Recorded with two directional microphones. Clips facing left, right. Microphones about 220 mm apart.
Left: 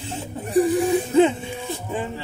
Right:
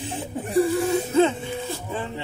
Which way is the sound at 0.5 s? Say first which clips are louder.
Left 2 dB; 15° left (ahead or behind).